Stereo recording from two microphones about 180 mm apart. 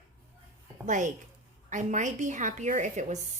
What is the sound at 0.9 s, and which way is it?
A woman's voice, 45° right (ahead or behind).